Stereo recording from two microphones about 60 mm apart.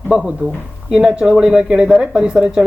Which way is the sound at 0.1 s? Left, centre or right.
Centre.